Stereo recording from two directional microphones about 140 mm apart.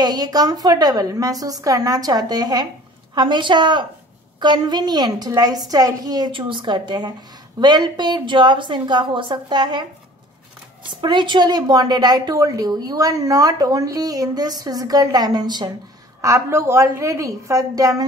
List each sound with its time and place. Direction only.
0.0 s a woman's voice: 25° right (ahead or behind)
10.9 s a woman's voice: 35° right (ahead or behind)
16.2 s a woman's voice: 20° right (ahead or behind)